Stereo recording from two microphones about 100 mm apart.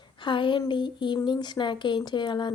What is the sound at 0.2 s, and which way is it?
Speech, 55° left (ahead or behind).